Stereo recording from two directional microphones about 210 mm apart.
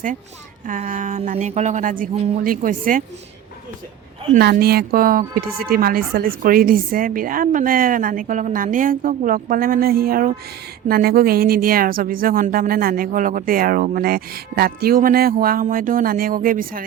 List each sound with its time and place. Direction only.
0.7 s a woman's voice: 35° right (ahead or behind)
4.4 s a woman's voice: 50° right (ahead or behind)